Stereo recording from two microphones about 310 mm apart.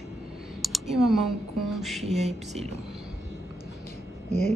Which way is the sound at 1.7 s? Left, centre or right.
Centre.